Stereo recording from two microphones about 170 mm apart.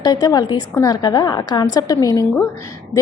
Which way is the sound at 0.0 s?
20° left (ahead or behind).